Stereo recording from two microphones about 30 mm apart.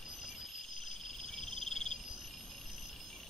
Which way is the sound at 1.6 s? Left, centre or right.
Centre.